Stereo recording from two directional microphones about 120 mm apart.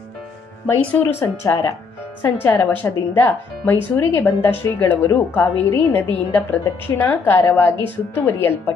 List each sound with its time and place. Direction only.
0.7 s a woman's voice: 15° left (ahead or behind)